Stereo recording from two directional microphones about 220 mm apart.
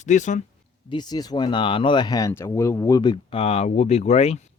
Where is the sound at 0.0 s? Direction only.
35° left (ahead or behind).